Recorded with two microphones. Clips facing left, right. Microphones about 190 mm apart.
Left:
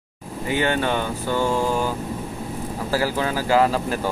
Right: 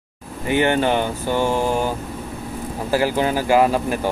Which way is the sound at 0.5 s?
25° right (ahead or behind).